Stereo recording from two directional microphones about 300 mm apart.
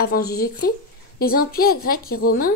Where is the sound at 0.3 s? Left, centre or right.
Left.